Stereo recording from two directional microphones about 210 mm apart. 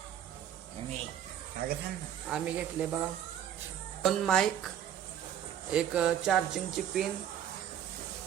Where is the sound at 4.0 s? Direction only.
Centre (ahead or behind).